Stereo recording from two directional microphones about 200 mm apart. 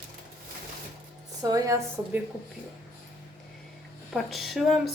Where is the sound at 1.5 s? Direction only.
15° right (ahead or behind).